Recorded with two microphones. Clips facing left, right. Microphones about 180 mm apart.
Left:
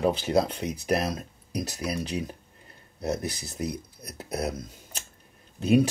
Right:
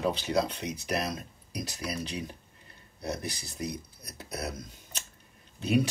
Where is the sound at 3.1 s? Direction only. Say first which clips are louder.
Left 5 dB; 50° left (ahead or behind).